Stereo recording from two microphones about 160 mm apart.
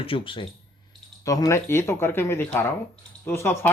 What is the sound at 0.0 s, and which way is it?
Speech, 35° left (ahead or behind).